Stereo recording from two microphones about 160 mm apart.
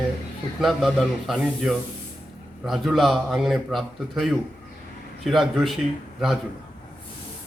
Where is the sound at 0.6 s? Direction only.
Centre (ahead or behind).